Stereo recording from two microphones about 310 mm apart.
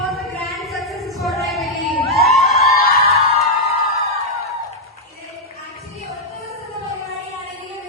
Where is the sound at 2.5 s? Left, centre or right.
Left.